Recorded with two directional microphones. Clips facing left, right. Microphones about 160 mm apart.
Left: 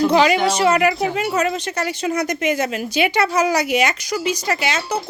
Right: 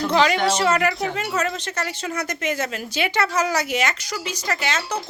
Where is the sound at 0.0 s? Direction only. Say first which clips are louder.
Left 4 dB; 10° left (ahead or behind).